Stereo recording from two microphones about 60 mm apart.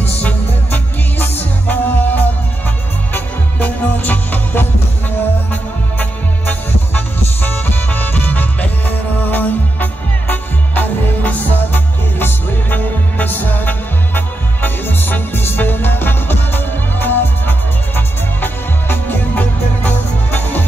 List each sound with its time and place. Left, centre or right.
0.0 s music: left